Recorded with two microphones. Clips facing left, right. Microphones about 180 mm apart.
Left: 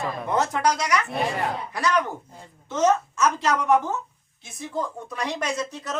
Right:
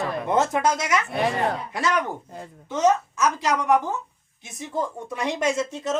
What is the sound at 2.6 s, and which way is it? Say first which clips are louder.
A woman's voice: right 1 dB; 10° right (ahead or behind).